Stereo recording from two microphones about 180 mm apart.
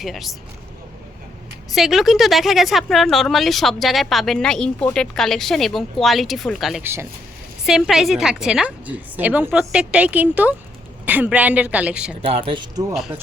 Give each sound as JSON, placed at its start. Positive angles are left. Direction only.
{"t": 0.0, "sound": "speech", "side_deg": 0}
{"t": 1.7, "sound": "speech", "side_deg": 0}
{"t": 6.8, "sound": "a woman's voice", "side_deg": -15}
{"t": 7.6, "sound": "a woman's voice", "side_deg": 0}
{"t": 12.2, "sound": "speech", "side_deg": -30}
{"t": 12.9, "sound": "speech", "side_deg": 0}